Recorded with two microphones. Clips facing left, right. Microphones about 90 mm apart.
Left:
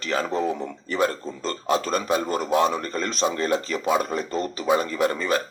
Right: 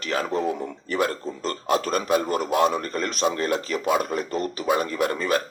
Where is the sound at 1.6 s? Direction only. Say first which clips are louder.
Even; 30° left (ahead or behind).